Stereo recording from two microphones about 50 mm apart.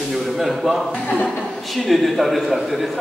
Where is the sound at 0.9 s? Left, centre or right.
Left.